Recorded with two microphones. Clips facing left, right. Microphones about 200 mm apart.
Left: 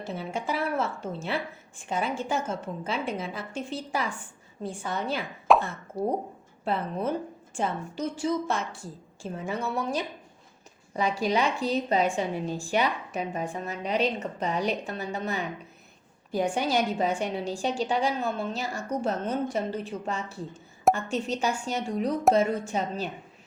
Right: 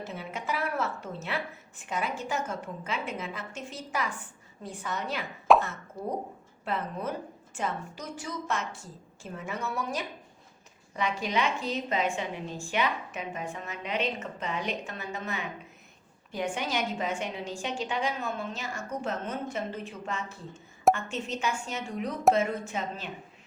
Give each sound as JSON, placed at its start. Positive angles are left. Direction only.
{"t": 0.0, "sound": "a woman's voice", "side_deg": 30}
{"t": 5.5, "sound": "plop", "side_deg": 0}
{"t": 6.0, "sound": "a woman's voice", "side_deg": 35}